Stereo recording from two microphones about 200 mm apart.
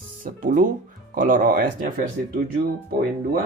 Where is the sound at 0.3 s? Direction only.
40° right (ahead or behind).